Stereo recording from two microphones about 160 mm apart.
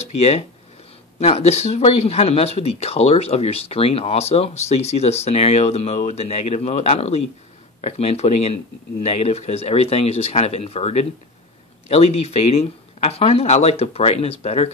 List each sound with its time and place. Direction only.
0.0 s speech: 45° left (ahead or behind)